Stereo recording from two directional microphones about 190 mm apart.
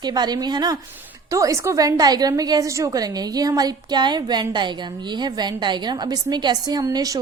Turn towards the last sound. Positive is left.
turn(degrees=-20)  # may be behind; listen again after turning